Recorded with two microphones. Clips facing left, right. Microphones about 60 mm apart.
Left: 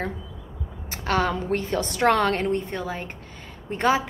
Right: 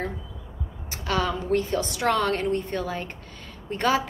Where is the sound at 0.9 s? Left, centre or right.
Left.